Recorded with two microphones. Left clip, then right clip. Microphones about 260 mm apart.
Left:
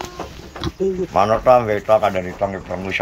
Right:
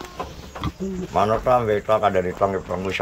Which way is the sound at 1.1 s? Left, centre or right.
Centre.